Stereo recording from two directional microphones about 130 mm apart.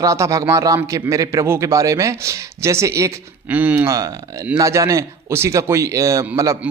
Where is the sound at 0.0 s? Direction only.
25° right (ahead or behind).